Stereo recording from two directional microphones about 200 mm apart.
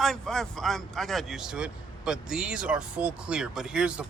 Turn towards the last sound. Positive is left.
turn(degrees=-5)  # may be behind; listen again after turning